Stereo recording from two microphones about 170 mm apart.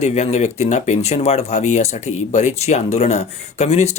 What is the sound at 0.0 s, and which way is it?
Speech, 40° left (ahead or behind).